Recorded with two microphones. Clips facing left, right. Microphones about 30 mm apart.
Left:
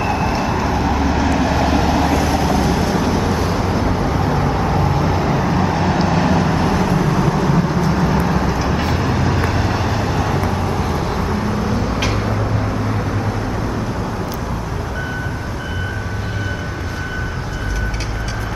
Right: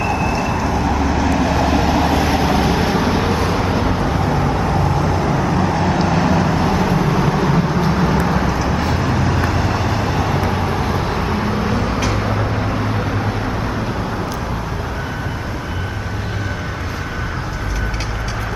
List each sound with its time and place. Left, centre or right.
0.0 s vehicle: centre
2.0 s vehicle: centre
8.5 s vehicle: centre